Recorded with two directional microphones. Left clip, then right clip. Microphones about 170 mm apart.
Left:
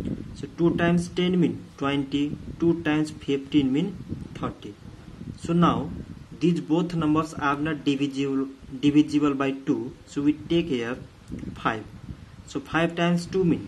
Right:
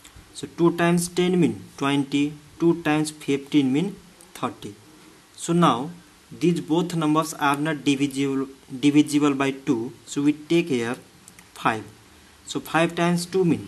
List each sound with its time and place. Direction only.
0.4 s speech: 30° right (ahead or behind)
6.4 s speech: 15° right (ahead or behind)